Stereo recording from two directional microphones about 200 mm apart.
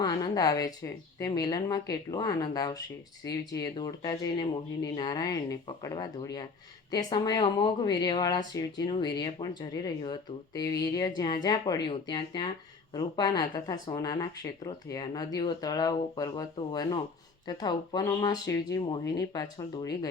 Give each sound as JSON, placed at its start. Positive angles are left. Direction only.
{"t": 0.0, "sound": "speech", "side_deg": 20}